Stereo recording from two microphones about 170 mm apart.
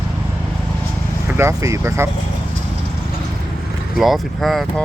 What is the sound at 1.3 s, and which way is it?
Speech, 15° right (ahead or behind).